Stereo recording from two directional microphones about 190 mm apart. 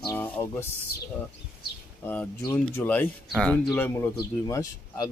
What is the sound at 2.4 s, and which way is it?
Speech, 10° left (ahead or behind).